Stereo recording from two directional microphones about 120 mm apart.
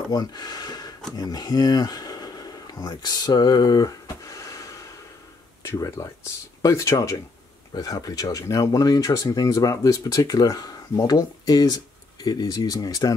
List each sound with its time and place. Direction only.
0.1 s speech: 35° left (ahead or behind)